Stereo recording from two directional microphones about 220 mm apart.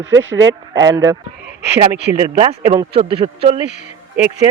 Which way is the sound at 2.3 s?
25° right (ahead or behind).